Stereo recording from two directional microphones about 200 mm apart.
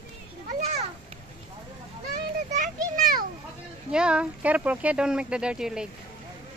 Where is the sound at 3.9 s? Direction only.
5° right (ahead or behind).